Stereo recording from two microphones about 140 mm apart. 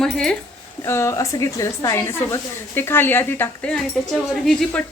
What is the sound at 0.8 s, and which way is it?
A woman's voice, 20° left (ahead or behind).